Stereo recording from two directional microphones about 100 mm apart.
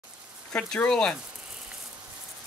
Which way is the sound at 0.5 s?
10° left (ahead or behind).